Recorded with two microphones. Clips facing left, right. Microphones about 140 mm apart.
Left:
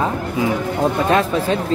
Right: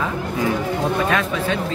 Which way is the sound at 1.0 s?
35° left (ahead or behind).